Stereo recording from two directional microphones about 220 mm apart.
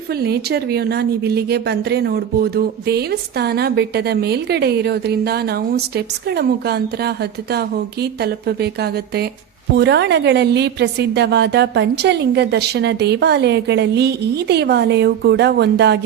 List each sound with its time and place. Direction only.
0.2 s a woman's voice: 45° right (ahead or behind)
8.2 s a woman's voice: 45° right (ahead or behind)